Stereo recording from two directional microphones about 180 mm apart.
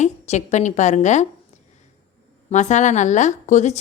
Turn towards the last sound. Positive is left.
turn(degrees=40)  # may be behind; listen again after turning